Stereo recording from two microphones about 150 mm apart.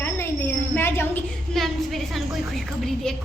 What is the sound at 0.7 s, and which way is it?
Cricket, 15° left (ahead or behind).